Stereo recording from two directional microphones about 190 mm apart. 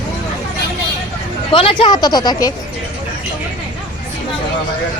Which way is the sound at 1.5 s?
30° left (ahead or behind).